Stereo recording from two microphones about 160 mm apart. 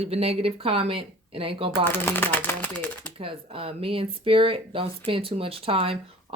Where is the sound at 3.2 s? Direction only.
35° right (ahead or behind).